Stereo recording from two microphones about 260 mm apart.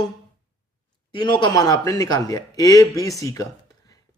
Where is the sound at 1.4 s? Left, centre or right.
Centre.